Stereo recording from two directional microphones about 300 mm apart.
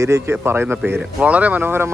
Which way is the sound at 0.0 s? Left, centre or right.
Centre.